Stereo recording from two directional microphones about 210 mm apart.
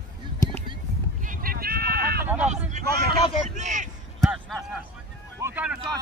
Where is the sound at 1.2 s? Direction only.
40° right (ahead or behind).